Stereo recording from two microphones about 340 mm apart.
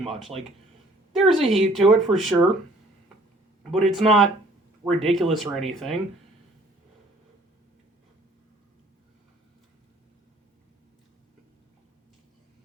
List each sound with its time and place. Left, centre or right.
0.0 s speech: centre
3.6 s speech: centre